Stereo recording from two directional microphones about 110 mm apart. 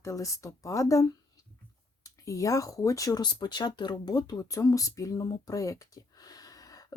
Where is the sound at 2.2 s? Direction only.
30° left (ahead or behind).